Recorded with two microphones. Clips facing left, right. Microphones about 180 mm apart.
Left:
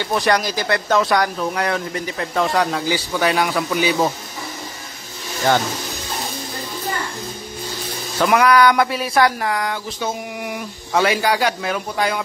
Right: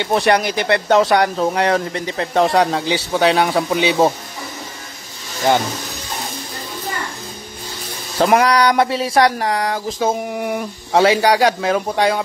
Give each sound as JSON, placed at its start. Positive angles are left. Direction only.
{"t": 0.3, "sound": "speech", "side_deg": -25}
{"t": 8.2, "sound": "speech", "side_deg": -30}
{"t": 10.9, "sound": "speech", "side_deg": -25}